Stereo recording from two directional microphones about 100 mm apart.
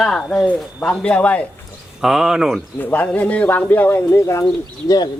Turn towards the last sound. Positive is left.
turn(degrees=40)  # may be behind; listen again after turning